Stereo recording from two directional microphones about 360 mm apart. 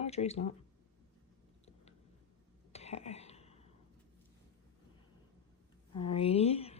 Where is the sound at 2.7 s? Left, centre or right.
Centre.